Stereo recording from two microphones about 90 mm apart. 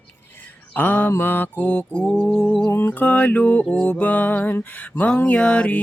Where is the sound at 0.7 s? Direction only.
20° left (ahead or behind).